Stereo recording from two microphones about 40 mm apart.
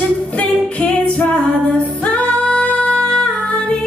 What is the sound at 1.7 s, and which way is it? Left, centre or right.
Singing, left.